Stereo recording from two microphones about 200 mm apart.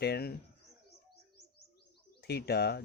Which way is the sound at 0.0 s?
55° left (ahead or behind).